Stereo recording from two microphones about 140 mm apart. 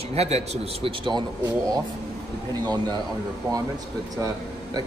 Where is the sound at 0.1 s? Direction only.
50° right (ahead or behind).